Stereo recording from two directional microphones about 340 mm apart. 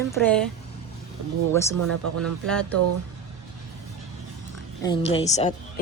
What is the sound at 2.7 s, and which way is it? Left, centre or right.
Speech, right.